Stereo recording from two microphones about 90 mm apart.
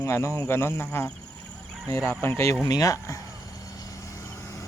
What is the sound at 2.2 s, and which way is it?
Speech, 30° left (ahead or behind).